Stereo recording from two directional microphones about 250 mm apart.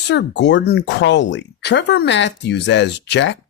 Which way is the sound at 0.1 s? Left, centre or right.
Left.